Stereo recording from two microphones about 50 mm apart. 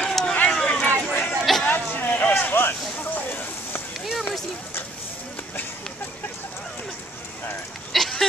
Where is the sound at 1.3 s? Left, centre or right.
Centre.